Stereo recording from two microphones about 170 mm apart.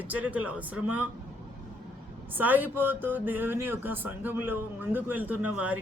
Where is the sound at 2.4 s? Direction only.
10° right (ahead or behind).